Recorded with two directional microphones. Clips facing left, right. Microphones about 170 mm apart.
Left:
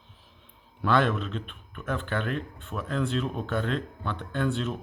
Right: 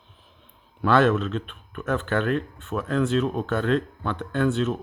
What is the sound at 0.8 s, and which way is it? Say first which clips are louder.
Speech: right 5 dB; 80° right.